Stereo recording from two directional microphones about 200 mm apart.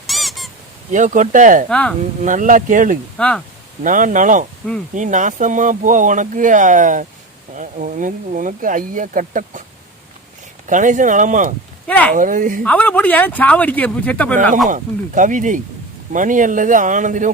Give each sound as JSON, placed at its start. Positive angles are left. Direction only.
{"t": 0.1, "sound": "honk", "side_deg": 0}
{"t": 0.9, "sound": "speech", "side_deg": -40}
{"t": 1.7, "sound": "speech", "side_deg": 5}
{"t": 2.2, "sound": "speech", "side_deg": -40}
{"t": 3.2, "sound": "speech", "side_deg": 5}
{"t": 3.8, "sound": "speech", "side_deg": -40}
{"t": 4.6, "sound": "speech", "side_deg": 5}
{"t": 4.9, "sound": "speech", "side_deg": -40}
{"t": 10.7, "sound": "speech", "side_deg": -40}
{"t": 11.9, "sound": "speech", "side_deg": 5}
{"t": 12.1, "sound": "speech", "side_deg": -40}
{"t": 12.6, "sound": "speech", "side_deg": 5}
{"t": 14.7, "sound": "speech", "side_deg": -40}